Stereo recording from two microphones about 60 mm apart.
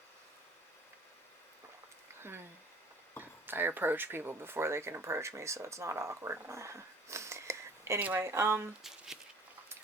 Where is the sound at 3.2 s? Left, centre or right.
Right.